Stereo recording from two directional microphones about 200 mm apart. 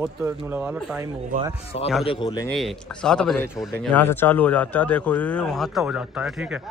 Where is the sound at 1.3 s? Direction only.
40° right (ahead or behind).